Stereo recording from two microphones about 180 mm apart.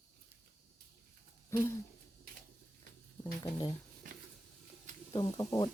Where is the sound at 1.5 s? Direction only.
15° left (ahead or behind).